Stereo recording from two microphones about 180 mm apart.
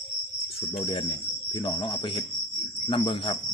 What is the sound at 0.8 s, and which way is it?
Speech, 30° left (ahead or behind).